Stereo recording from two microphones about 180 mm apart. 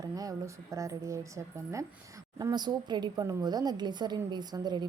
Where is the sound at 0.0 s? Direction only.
20° right (ahead or behind).